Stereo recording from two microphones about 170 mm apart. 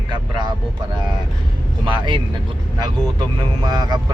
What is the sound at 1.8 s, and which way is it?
Speech, 30° right (ahead or behind).